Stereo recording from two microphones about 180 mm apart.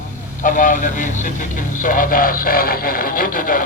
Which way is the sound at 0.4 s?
50° left (ahead or behind).